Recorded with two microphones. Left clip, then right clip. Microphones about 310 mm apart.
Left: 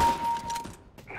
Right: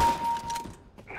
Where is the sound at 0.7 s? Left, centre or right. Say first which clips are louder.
Even; centre.